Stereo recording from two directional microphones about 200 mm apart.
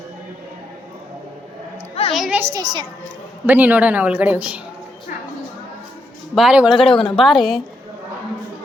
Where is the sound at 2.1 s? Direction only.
Centre (ahead or behind).